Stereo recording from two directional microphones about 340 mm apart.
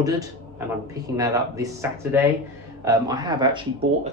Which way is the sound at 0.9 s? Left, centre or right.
Centre.